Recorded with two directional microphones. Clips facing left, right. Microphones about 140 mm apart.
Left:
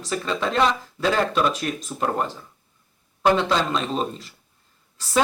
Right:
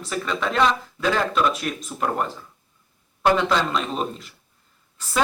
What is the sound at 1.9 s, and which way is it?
Speech, 25° left (ahead or behind).